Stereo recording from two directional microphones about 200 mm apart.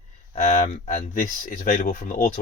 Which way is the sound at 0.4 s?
40° left (ahead or behind).